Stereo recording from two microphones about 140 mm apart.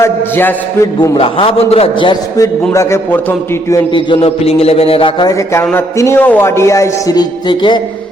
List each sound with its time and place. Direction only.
0.0 s speech: 15° left (ahead or behind)
1.1 s mantra: 40° left (ahead or behind)
2.7 s speech: 15° left (ahead or behind)
3.9 s mantra: 40° left (ahead or behind); by 5.6 s 20° left (ahead or behind)
5.7 s speech: 15° left (ahead or behind); by 7.8 s 35° left (ahead or behind)